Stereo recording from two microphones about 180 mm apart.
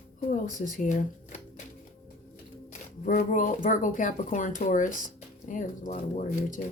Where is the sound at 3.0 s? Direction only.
45° left (ahead or behind).